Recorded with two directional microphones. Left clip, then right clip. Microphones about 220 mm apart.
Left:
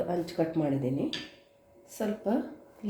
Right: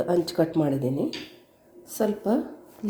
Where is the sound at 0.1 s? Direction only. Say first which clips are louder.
Right 7 dB; 30° right (ahead or behind).